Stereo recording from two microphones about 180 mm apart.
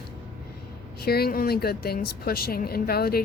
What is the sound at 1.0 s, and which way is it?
A woman's voice, 60° left (ahead or behind).